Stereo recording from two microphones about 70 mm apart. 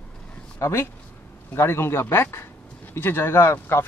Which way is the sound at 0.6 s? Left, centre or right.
Left.